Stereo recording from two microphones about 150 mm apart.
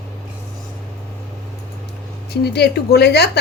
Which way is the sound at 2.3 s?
90° left.